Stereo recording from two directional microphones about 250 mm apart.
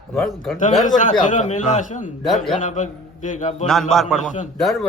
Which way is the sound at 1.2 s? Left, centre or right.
Left.